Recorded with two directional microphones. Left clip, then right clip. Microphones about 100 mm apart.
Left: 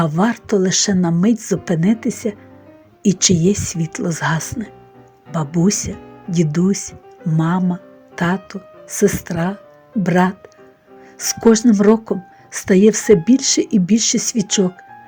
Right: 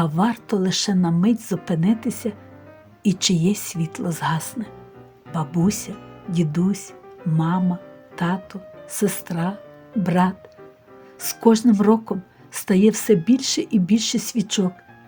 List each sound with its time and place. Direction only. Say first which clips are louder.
0.0 s a woman's voice: left 4 dB; 45° left (ahead or behind)